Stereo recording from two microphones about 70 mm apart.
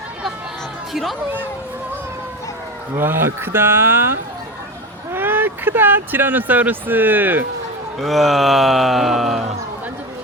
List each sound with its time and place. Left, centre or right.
2.9 s speech: right
5.1 s speech: right
8.0 s speech: centre